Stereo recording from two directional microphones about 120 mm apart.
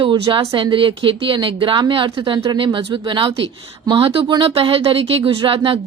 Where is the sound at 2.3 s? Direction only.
30° right (ahead or behind).